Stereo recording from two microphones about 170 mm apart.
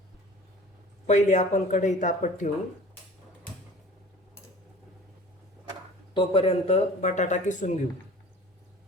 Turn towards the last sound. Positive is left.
turn(degrees=45)  # may be behind; listen again after turning